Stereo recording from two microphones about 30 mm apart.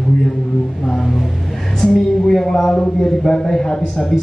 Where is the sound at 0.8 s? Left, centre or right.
Centre.